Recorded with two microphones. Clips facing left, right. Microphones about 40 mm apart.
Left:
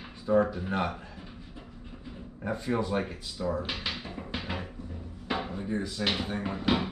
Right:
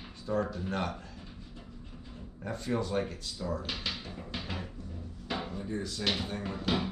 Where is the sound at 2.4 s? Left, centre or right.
Centre.